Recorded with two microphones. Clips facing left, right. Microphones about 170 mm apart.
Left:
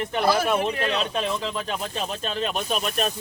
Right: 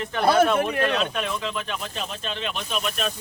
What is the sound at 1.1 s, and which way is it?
Speech, 35° left (ahead or behind).